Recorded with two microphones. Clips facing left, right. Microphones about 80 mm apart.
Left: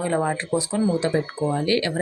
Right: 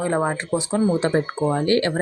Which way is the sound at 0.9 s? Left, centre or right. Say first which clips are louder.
Right 2 dB; right.